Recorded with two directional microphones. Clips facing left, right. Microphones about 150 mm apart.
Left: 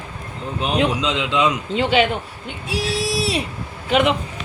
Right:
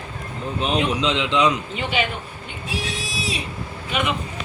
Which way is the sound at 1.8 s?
90° left.